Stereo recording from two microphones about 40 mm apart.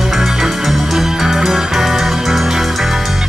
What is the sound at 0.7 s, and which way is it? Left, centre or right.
Music, centre.